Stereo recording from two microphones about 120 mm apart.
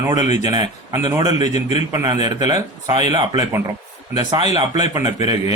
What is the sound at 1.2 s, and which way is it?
Speech, 35° right (ahead or behind).